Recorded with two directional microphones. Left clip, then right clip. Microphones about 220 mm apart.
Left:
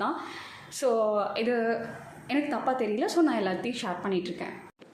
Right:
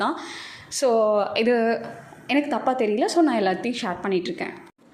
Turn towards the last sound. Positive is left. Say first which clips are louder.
# right 6 dB
turn(degrees=-25)  # may be behind; listen again after turning